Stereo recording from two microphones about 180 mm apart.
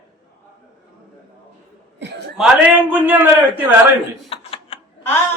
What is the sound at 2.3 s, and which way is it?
A man's voice, 5° right (ahead or behind).